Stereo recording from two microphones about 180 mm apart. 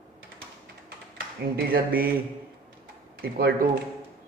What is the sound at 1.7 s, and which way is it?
Speech, 55° right (ahead or behind).